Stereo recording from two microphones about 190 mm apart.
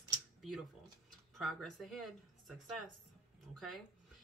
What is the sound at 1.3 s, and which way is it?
A woman's voice, centre (ahead or behind).